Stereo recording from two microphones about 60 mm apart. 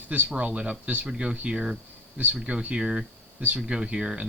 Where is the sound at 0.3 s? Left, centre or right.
Right.